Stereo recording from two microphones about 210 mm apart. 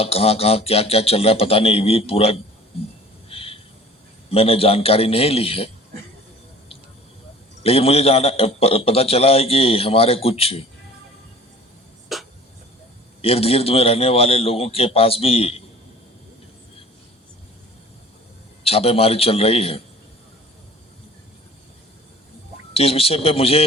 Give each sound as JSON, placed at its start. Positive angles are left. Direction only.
{"t": 0.0, "sound": "a man's voice", "side_deg": 30}
{"t": 3.2, "sound": "a sound", "side_deg": 25}
{"t": 4.3, "sound": "a man's voice", "side_deg": 30}
{"t": 7.6, "sound": "a man's voice", "side_deg": 30}
{"t": 12.1, "sound": "a sound", "side_deg": 0}
{"t": 13.2, "sound": "a man's voice", "side_deg": 30}
{"t": 18.6, "sound": "a man's voice", "side_deg": 30}
{"t": 22.7, "sound": "a man's voice", "side_deg": 30}